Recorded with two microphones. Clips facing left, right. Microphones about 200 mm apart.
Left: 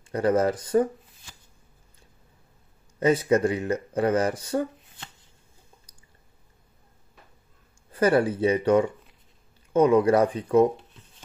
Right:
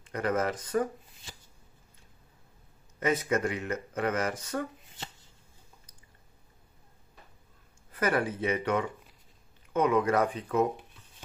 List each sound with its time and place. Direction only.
0.1 s speech: 30° left (ahead or behind)
3.0 s speech: 30° left (ahead or behind)
7.9 s speech: 30° left (ahead or behind)